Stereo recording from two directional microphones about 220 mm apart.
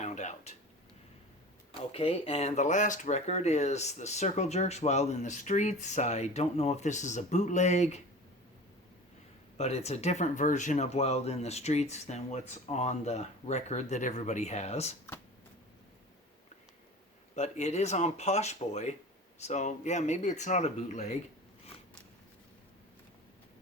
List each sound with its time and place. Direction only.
0.0 s a sound: 30° left (ahead or behind)
1.9 s speech: 25° left (ahead or behind)
9.6 s speech: 30° left (ahead or behind)
17.3 s speech: 30° left (ahead or behind)